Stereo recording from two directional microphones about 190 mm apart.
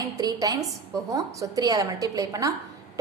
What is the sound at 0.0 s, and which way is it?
A woman's voice, 20° right (ahead or behind).